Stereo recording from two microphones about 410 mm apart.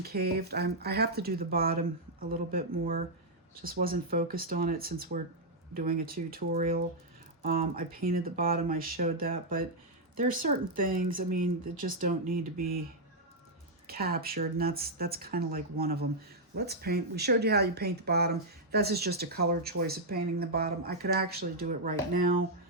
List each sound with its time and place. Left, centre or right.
0.0 s speech: right
10.8 s speech: right
13.8 s speech: right